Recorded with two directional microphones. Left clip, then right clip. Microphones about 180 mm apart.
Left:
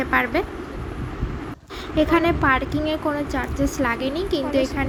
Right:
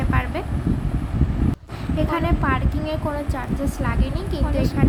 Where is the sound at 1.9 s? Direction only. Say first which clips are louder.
Left 5 dB; 20° left (ahead or behind).